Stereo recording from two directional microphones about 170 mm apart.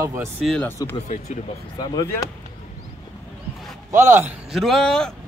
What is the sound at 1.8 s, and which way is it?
Speech, 20° left (ahead or behind).